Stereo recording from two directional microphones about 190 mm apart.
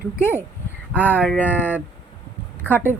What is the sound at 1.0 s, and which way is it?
Speech, 10° left (ahead or behind).